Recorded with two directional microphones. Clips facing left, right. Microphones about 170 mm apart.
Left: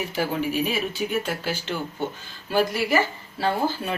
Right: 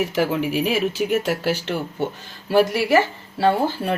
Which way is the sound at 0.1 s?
80° right.